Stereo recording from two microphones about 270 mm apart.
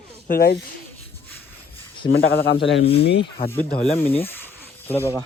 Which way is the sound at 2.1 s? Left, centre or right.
Left.